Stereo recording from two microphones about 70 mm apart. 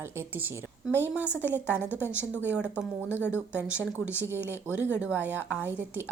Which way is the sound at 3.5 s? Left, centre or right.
Centre.